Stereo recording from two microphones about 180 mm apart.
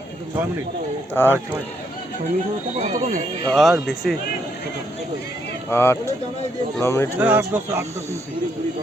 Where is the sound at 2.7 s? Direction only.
40° right (ahead or behind).